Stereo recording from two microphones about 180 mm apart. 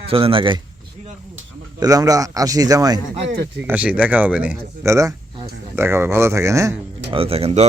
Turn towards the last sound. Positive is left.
turn(degrees=-35)  # may be behind; listen again after turning